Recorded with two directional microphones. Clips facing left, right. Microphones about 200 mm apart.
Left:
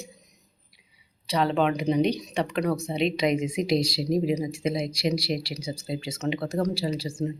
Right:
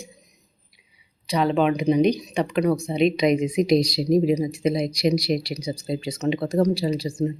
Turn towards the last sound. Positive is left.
turn(degrees=-35)  # may be behind; listen again after turning